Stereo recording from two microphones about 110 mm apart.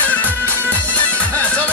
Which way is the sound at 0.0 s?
15° left (ahead or behind).